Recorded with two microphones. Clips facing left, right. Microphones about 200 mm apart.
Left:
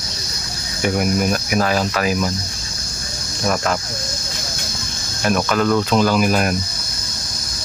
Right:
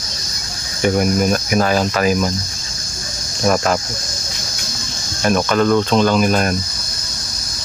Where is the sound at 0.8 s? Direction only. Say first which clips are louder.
Right 3 dB; 5° left (ahead or behind).